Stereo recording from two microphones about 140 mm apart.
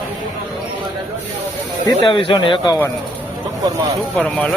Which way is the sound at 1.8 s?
40° left (ahead or behind).